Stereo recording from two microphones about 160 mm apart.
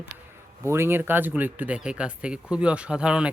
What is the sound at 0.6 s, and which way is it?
A man's voice, 15° right (ahead or behind).